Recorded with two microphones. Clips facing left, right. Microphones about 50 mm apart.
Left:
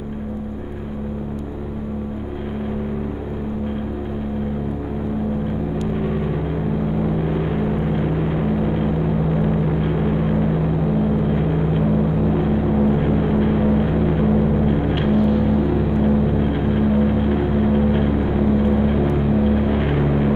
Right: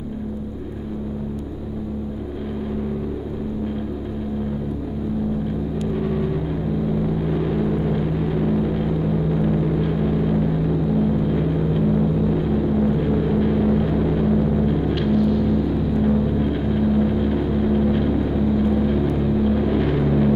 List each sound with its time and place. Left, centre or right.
5.9 s vehicle: left